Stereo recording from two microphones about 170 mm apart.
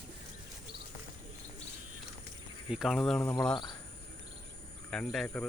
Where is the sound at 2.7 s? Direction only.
Centre (ahead or behind).